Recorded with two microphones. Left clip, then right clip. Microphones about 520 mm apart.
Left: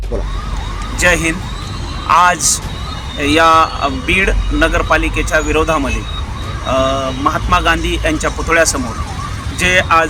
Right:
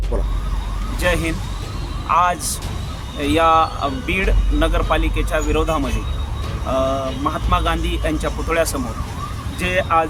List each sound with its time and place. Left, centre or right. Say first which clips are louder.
0.9 s a sound: left 7 dB; right
2.0 s speech: left 7 dB; right
7.3 s speech: left 8 dB; right